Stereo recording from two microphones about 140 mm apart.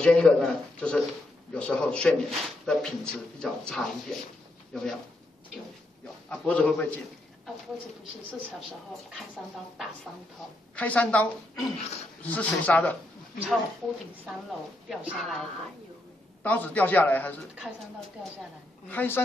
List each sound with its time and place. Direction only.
0.0 s speech: 5° left (ahead or behind)
6.2 s speech: 10° left (ahead or behind)
10.8 s speech: 10° left (ahead or behind)
14.9 s a woman's voice: 10° right (ahead or behind)
15.1 s speech: centre (ahead or behind)
16.4 s speech: 10° left (ahead or behind)
18.9 s speech: 15° left (ahead or behind)